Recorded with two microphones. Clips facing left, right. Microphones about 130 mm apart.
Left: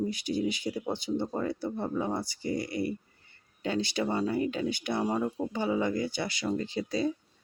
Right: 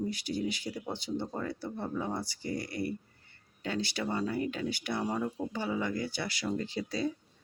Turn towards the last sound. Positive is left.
turn(degrees=20)  # may be behind; listen again after turning